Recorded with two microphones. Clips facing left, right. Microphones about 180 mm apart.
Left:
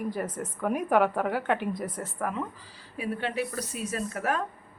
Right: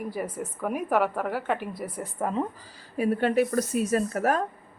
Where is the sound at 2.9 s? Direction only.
45° right (ahead or behind).